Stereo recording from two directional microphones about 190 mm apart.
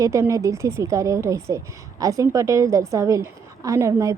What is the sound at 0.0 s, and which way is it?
A woman's voice, 15° right (ahead or behind).